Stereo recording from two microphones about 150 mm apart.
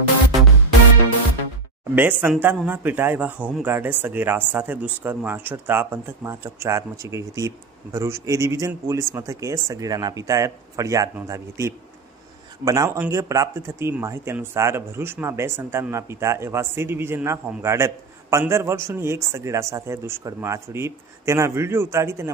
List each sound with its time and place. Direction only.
2.0 s speech: 10° right (ahead or behind)